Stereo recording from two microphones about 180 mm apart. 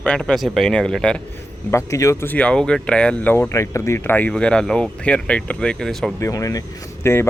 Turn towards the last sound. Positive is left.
turn(degrees=15)  # may be behind; listen again after turning